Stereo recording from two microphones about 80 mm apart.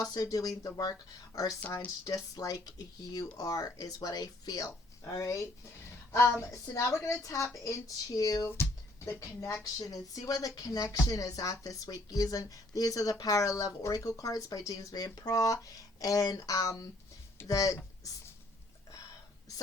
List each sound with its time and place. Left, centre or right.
0.0 s a woman's voice: left